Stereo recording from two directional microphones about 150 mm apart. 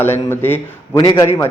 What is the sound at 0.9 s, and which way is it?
Speech, 25° left (ahead or behind).